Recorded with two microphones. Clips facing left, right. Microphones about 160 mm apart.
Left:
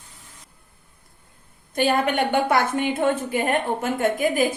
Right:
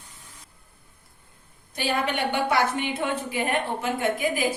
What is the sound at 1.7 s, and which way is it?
A woman's voice, 50° left (ahead or behind).